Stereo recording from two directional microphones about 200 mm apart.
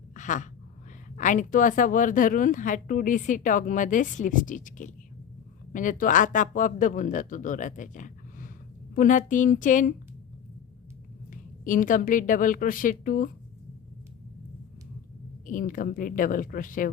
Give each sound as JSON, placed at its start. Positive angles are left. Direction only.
{"t": 0.1, "sound": "a sound", "side_deg": 40}
{"t": 1.1, "sound": "a woman's voice", "side_deg": 40}
{"t": 11.3, "sound": "a woman's voice", "side_deg": 40}
{"t": 15.4, "sound": "speech", "side_deg": 40}